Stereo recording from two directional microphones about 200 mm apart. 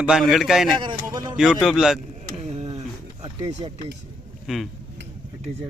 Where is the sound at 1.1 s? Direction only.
20° right (ahead or behind).